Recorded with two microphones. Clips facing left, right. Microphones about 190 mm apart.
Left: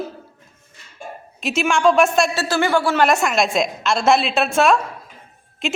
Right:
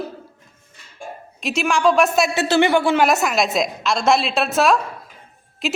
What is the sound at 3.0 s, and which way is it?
A woman's voice, centre (ahead or behind).